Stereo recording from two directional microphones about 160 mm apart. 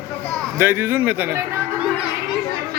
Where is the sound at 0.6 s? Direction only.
15° right (ahead or behind).